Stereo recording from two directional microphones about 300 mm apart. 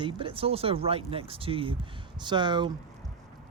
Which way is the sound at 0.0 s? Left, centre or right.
Centre.